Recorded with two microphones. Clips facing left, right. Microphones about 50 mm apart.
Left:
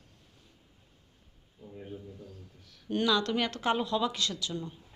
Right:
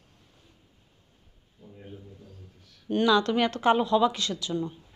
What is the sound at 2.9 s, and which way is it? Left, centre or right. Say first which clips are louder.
Speech: right 5 dB; centre.